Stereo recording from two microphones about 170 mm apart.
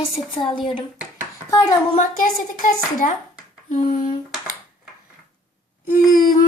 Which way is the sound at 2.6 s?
50° left (ahead or behind).